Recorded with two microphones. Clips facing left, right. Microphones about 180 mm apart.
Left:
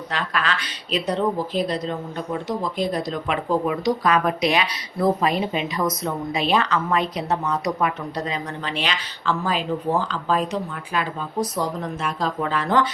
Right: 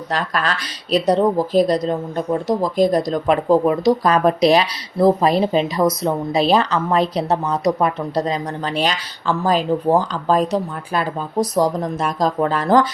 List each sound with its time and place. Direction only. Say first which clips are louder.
0.1 s speech: right 4 dB; 40° right (ahead or behind)